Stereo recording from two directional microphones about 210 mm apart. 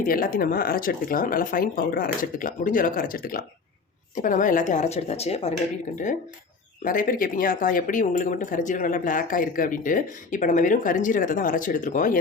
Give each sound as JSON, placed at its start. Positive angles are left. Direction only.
{"t": 0.0, "sound": "speech", "side_deg": 40}
{"t": 6.8, "sound": "speech", "side_deg": 40}